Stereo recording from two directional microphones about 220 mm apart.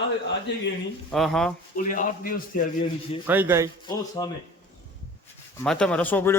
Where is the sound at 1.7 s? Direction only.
40° left (ahead or behind).